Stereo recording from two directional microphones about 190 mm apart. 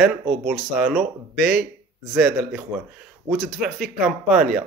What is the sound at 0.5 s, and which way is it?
Speech, 5° right (ahead or behind).